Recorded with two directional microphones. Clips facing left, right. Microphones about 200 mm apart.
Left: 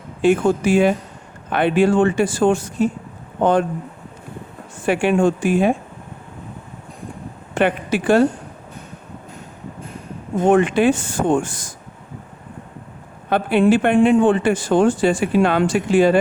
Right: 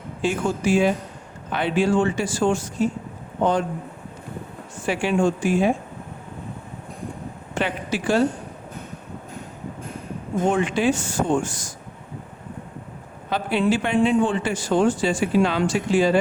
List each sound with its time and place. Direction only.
0.2 s speech: 55° left (ahead or behind)
4.9 s speech: 55° left (ahead or behind)
7.5 s speech: 55° left (ahead or behind)
10.5 s speech: 55° left (ahead or behind)
13.3 s speech: 55° left (ahead or behind)